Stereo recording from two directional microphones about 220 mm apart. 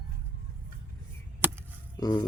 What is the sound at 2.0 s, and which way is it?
Speech, 15° left (ahead or behind).